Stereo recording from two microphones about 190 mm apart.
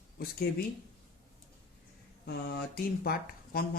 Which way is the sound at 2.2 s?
55° left (ahead or behind).